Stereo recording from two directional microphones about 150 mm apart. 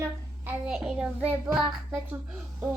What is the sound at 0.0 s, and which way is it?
Child singing, 10° right (ahead or behind).